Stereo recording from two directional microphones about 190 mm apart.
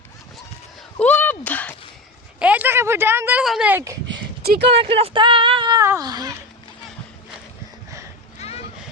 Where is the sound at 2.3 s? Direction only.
10° right (ahead or behind).